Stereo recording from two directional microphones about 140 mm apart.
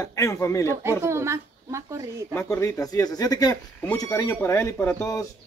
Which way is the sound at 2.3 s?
20° left (ahead or behind).